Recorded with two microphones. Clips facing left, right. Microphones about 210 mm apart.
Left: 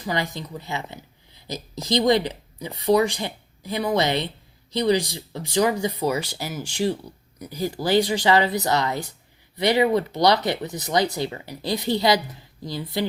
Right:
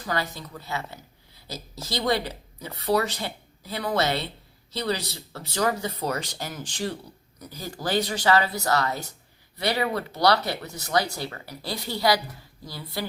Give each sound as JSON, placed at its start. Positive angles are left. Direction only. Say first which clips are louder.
{"t": 0.0, "sound": "speech", "louder": "left 3 dB", "side_deg": 15}